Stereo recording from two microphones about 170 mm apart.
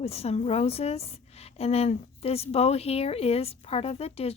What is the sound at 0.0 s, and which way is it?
Speech, 35° left (ahead or behind).